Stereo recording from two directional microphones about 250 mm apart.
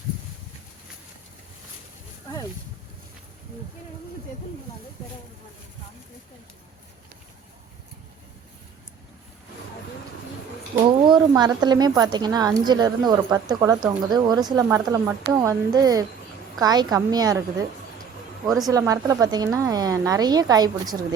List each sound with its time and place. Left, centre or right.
11.0 s speech: centre
18.4 s speech: centre
18.7 s speech: centre